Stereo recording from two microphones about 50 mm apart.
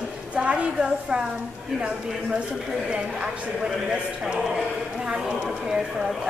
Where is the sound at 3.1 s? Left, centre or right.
Centre.